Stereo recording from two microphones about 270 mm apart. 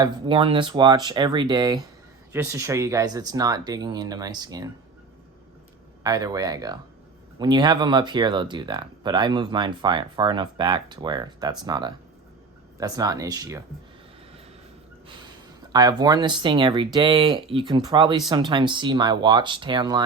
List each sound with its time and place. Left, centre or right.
0.0 s speech: centre
6.0 s speech: centre
15.7 s speech: centre